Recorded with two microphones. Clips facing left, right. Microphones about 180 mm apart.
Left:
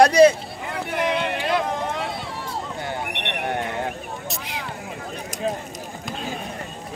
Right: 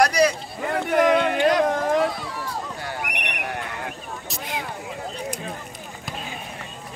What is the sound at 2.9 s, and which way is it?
Horse, 25° left (ahead or behind).